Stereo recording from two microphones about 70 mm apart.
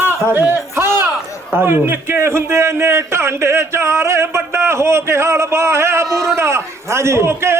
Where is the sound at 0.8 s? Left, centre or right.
Right.